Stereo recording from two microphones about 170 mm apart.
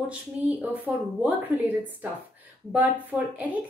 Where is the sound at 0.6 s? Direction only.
10° right (ahead or behind).